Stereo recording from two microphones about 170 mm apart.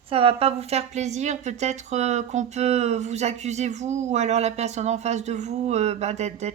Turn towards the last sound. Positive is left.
turn(degrees=-40)  # may be behind; listen again after turning